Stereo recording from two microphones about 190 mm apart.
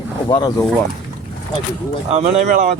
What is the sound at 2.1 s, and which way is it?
Speech, 35° right (ahead or behind).